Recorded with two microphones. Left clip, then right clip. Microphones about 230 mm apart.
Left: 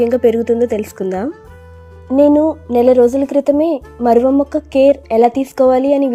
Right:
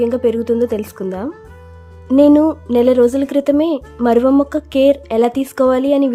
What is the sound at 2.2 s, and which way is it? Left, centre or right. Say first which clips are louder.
A woman's voice: even; centre.